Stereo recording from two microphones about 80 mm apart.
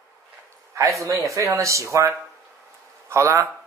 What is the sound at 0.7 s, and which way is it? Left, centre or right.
Speech, right.